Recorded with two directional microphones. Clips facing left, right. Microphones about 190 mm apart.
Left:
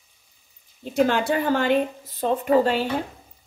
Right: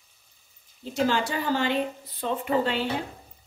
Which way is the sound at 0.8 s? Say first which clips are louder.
Left 4 dB; 55° left (ahead or behind).